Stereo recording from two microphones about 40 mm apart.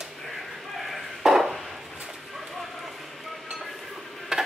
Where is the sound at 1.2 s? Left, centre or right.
Centre.